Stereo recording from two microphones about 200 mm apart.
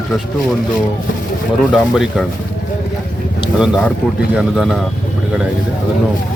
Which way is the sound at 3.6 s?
5° right (ahead or behind).